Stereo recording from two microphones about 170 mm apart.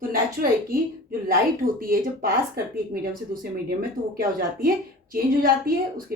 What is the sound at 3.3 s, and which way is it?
Speech, 55° right (ahead or behind).